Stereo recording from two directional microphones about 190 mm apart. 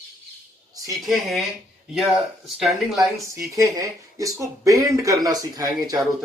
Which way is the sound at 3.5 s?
15° right (ahead or behind).